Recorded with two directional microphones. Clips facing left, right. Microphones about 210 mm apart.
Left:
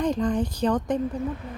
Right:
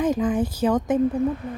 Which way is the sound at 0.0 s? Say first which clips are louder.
Right 2 dB; 5° right (ahead or behind).